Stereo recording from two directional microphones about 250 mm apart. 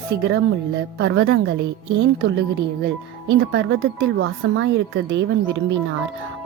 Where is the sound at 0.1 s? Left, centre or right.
Right.